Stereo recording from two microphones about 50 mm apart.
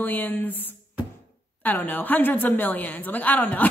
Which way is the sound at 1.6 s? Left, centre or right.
Left.